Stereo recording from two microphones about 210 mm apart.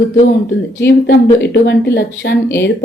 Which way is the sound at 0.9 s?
55° left (ahead or behind).